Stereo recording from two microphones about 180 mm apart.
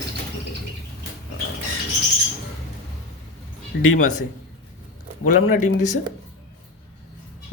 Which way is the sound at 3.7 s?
75° left (ahead or behind).